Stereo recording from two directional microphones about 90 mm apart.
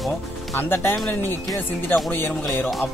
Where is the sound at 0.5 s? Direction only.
25° left (ahead or behind).